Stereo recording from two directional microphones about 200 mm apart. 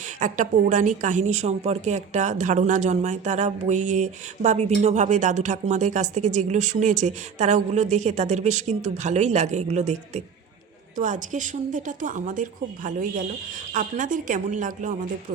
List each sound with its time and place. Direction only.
0.2 s a woman's voice: 40° right (ahead or behind)